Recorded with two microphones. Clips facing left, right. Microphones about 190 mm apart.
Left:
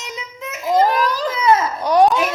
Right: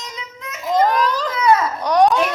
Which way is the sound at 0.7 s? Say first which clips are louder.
Left 1 dB; 10° left (ahead or behind).